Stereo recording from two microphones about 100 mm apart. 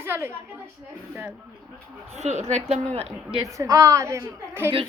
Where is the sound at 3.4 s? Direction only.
35° right (ahead or behind).